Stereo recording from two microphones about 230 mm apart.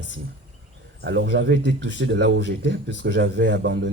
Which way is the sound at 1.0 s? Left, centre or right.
Right.